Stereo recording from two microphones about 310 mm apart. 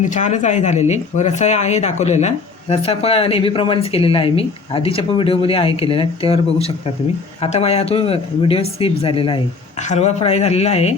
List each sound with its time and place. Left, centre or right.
0.0 s speech: left